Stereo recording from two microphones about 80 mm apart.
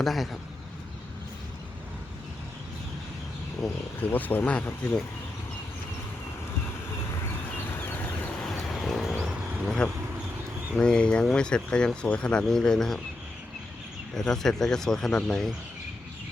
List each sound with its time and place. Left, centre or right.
0.0 s speech: centre
3.6 s speech: centre
4.1 s speech: left
8.5 s bird: centre
9.6 s speech: centre
14.2 s speech: centre